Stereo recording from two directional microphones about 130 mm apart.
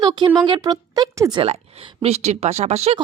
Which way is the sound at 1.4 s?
50° right (ahead or behind).